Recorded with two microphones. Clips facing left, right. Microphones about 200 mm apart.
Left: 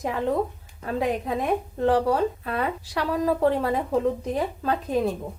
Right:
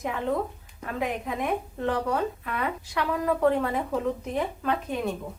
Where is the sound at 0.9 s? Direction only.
30° left (ahead or behind).